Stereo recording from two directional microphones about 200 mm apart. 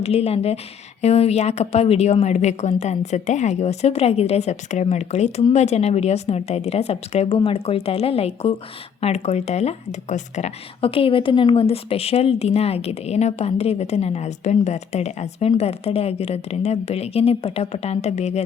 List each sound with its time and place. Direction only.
0.0 s speech: 30° left (ahead or behind)